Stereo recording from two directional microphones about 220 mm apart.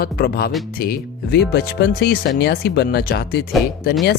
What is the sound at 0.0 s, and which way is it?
Speech, 45° left (ahead or behind).